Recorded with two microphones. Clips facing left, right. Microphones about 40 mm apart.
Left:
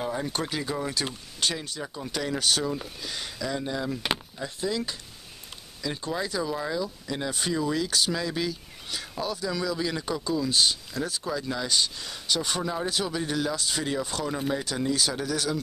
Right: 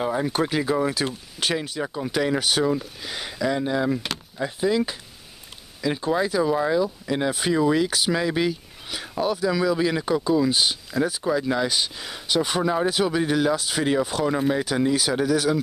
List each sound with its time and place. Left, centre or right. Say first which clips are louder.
0.0 s a sound: right 6 dB; right
0.3 s speech: right 7 dB; centre; by 7.2 s right
7.2 s speech: right 5 dB; centre
7.5 s speech: right 6 dB; right